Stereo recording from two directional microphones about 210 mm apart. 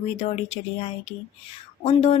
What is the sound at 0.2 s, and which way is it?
Speech, 30° left (ahead or behind).